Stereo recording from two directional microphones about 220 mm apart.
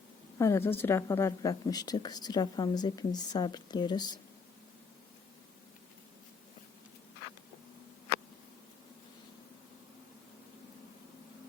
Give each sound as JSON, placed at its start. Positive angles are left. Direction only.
{"t": 0.3, "sound": "a woman's voice", "side_deg": 15}